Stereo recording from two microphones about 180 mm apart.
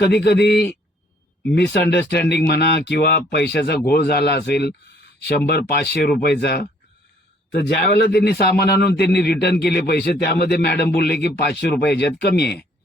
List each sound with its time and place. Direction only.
0.0 s a man's voice: 65° left (ahead or behind)
7.7 s a man's voice: 60° left (ahead or behind)